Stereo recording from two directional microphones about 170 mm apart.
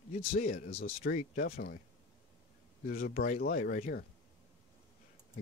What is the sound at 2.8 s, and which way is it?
Speech, 55° left (ahead or behind).